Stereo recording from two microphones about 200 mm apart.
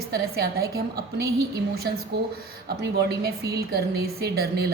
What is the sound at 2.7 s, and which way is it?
A woman's voice, 55° right (ahead or behind).